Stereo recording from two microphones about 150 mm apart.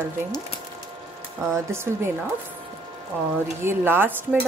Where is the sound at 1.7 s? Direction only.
15° right (ahead or behind).